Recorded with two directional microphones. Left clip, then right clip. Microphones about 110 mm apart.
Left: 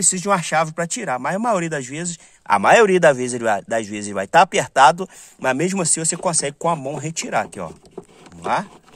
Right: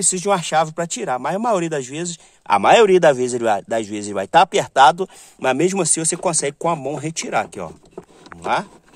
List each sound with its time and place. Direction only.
0.0 s speech: 20° right (ahead or behind)